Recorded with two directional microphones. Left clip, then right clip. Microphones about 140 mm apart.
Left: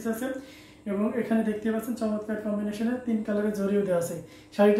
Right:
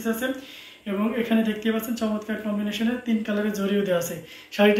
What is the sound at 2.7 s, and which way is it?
Speech, 40° left (ahead or behind).